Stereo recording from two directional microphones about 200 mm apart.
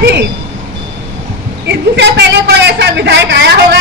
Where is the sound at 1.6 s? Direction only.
60° right (ahead or behind).